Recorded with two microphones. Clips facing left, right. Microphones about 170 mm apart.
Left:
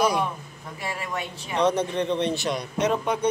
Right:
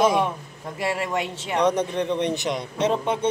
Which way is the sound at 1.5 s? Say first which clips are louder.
Right 1 dB; 15° right (ahead or behind).